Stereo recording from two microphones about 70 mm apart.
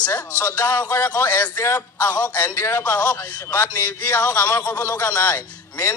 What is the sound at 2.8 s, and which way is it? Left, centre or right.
A man's voice, centre.